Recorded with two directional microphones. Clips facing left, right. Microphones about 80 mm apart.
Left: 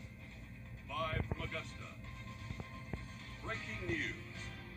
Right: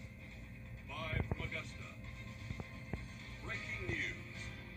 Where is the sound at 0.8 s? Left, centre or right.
Left.